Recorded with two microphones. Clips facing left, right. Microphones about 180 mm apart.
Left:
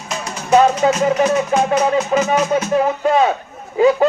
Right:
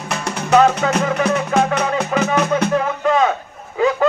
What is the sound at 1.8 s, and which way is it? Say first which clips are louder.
Speech: left 3 dB; 60° right (ahead or behind).